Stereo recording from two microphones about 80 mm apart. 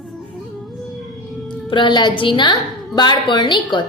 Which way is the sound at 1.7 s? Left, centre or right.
Left.